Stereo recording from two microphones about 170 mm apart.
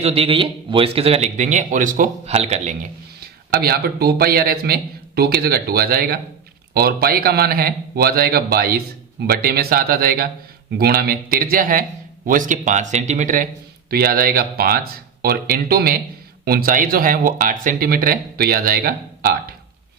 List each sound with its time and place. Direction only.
0.0 s speech: 35° right (ahead or behind)
3.5 s a man's voice: 65° right (ahead or behind)